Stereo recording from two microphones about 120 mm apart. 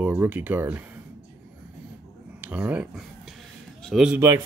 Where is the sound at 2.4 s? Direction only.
15° right (ahead or behind).